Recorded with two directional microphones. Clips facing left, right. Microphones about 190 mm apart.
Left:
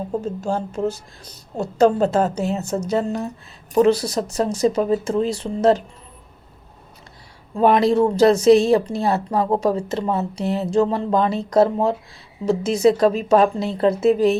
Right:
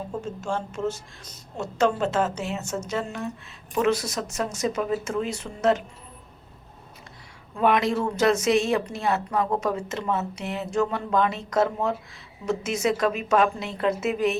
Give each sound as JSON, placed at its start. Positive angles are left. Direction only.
{"t": 0.1, "sound": "speech", "side_deg": 35}
{"t": 7.5, "sound": "speech", "side_deg": 35}